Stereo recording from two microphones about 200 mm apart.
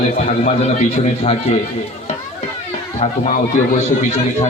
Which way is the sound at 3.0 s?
35° left (ahead or behind).